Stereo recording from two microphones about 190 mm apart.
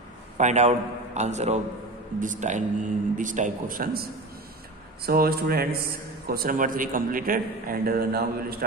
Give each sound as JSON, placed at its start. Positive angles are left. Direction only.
{"t": 0.4, "sound": "a man's voice", "side_deg": -35}